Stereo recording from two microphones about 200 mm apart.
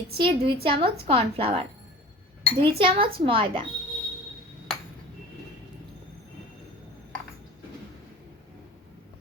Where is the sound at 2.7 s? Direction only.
25° right (ahead or behind).